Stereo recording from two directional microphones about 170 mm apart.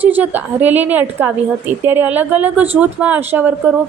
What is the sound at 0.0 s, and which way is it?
A woman's voice, 10° right (ahead or behind).